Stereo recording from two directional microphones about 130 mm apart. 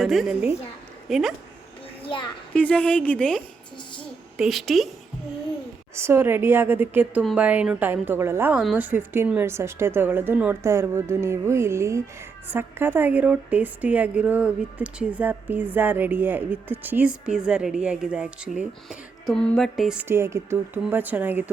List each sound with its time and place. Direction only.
0.0 s a woman's voice: centre (ahead or behind)
2.0 s a woman's voice: 40° left (ahead or behind)
2.5 s a woman's voice: 10° left (ahead or behind)
4.4 s music: centre (ahead or behind)
5.9 s a woman's voice: 20° right (ahead or behind)
19.3 s music: 5° left (ahead or behind)
20.0 s a woman's voice: 20° right (ahead or behind)